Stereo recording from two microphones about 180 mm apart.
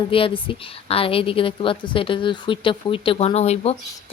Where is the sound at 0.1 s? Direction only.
30° left (ahead or behind).